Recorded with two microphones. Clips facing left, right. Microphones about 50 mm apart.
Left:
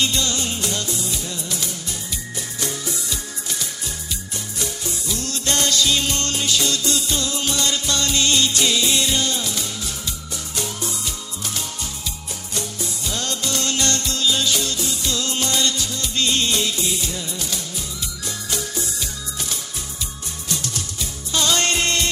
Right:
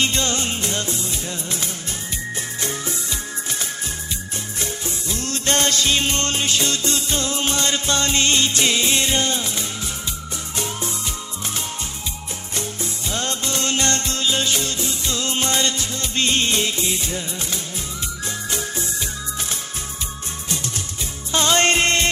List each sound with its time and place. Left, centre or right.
0.0 s music: right
4.6 s music: right
21.3 s music: right